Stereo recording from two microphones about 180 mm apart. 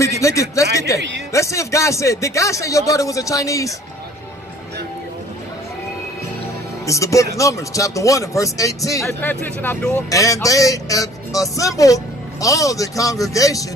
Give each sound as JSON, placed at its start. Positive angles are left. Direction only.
{"t": 0.0, "sound": "a sound", "side_deg": 15}
{"t": 0.7, "sound": "music", "side_deg": 15}
{"t": 1.3, "sound": "speech", "side_deg": 15}
{"t": 6.9, "sound": "speech", "side_deg": 15}
{"t": 10.0, "sound": "speech", "side_deg": 20}